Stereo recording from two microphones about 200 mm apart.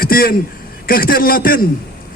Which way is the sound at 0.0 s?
45° left (ahead or behind).